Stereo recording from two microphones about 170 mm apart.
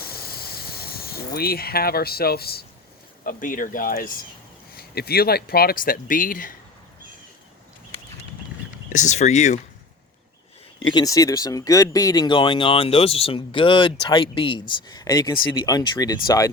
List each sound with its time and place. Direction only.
0.0 s a sound: 65° left (ahead or behind)
1.4 s speech: 65° left (ahead or behind)
3.2 s speech: 55° left (ahead or behind)
4.7 s speech: 65° left (ahead or behind)
8.9 s speech: 45° left (ahead or behind)
10.9 s speech: 20° left (ahead or behind)